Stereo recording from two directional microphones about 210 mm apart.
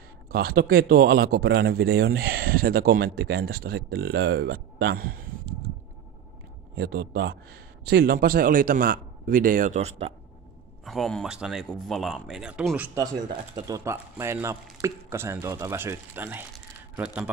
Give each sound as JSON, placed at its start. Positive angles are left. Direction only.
{"t": 0.3, "sound": "a man's voice", "side_deg": -45}
{"t": 6.8, "sound": "a man's voice", "side_deg": -50}
{"t": 10.9, "sound": "a man's voice", "side_deg": 0}